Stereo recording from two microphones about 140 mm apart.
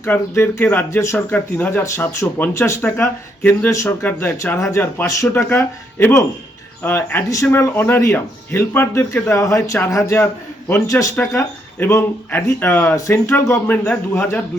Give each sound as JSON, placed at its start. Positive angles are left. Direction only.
{"t": 0.0, "sound": "speech", "side_deg": 15}